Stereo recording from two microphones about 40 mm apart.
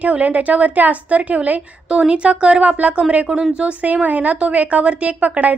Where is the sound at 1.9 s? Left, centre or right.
Right.